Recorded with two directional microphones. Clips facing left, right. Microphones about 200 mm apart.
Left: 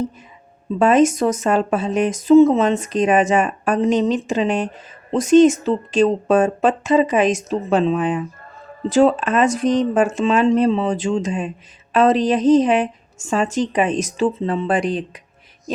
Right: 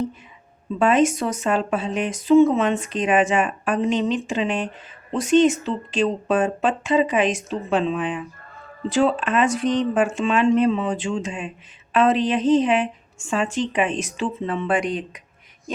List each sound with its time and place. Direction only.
0.8 s speech: 40° left (ahead or behind)